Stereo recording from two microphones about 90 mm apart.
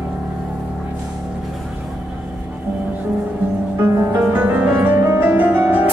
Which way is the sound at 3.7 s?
20° right (ahead or behind).